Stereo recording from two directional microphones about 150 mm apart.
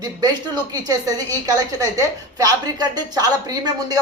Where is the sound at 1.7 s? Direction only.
20° right (ahead or behind).